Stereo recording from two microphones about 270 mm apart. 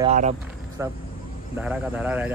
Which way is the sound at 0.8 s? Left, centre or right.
Centre.